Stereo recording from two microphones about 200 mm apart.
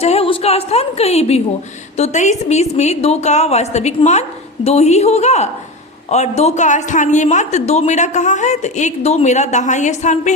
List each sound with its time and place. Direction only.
0.0 s a woman's voice: 30° left (ahead or behind)